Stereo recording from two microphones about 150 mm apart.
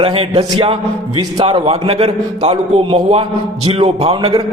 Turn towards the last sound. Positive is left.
turn(degrees=-35)  # may be behind; listen again after turning